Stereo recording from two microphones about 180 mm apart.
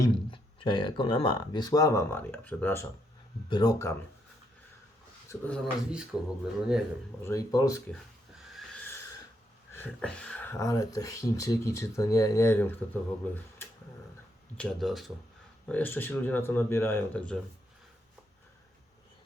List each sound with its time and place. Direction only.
0.0 s speech: 25° left (ahead or behind); by 2.8 s 10° left (ahead or behind)
3.5 s speech: 20° left (ahead or behind)
5.3 s speech: 10° left (ahead or behind)
7.2 s speech: 15° left (ahead or behind)
9.7 s speech: 10° left (ahead or behind)
15.7 s speech: 10° left (ahead or behind)